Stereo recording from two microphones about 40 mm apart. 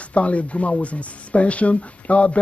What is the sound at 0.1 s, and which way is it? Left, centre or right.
Speech, left.